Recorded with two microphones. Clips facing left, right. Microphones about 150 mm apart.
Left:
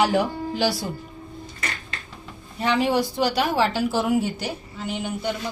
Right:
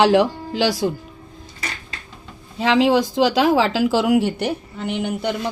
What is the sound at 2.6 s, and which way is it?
Speech, 90° right.